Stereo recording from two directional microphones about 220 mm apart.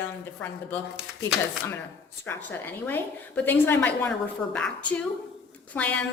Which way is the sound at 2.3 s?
10° left (ahead or behind).